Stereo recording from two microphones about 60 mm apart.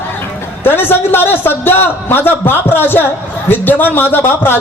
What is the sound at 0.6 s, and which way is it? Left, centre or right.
Speech, left.